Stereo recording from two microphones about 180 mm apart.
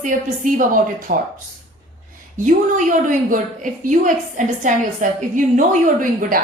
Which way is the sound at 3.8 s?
45° right (ahead or behind).